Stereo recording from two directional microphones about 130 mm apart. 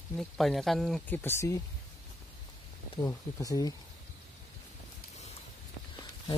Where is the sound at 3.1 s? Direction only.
25° left (ahead or behind).